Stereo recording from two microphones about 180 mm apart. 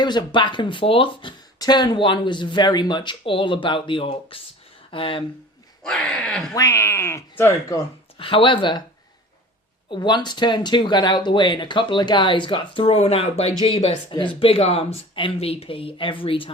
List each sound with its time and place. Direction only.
0.0 s speech: 25° left (ahead or behind)
5.8 s speech: 5° left (ahead or behind)
6.5 s speech: 20° left (ahead or behind)
8.2 s speech: 30° left (ahead or behind)
9.9 s speech: 25° left (ahead or behind)